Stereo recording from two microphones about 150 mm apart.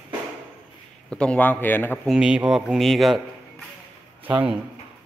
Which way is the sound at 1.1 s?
5° left (ahead or behind).